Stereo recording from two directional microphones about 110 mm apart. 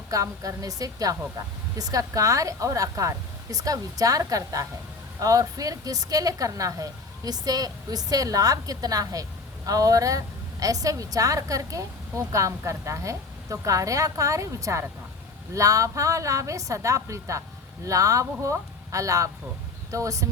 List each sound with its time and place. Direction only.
0.1 s a woman's voice: 30° right (ahead or behind)